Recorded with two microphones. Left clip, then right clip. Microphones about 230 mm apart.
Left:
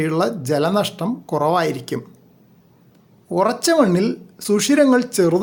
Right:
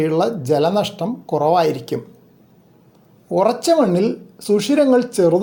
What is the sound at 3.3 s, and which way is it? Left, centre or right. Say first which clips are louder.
Speech: right 2 dB; centre.